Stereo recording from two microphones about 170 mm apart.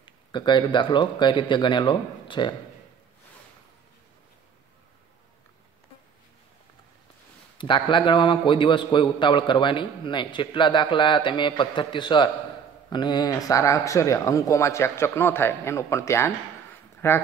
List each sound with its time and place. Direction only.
0.0 s a man's voice: 30° left (ahead or behind)
7.5 s a man's voice: 30° left (ahead or behind)